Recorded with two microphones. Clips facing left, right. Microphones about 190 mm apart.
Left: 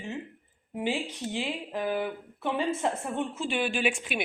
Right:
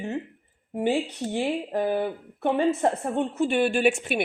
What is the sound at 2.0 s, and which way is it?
Speech, 60° right (ahead or behind).